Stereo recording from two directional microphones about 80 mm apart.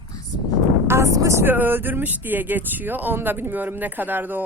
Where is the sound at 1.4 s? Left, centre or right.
Right.